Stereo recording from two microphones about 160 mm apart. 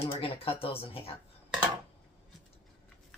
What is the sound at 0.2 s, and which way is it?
Speech, 35° left (ahead or behind).